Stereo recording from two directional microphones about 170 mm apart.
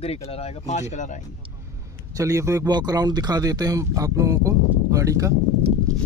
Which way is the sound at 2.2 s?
15° right (ahead or behind).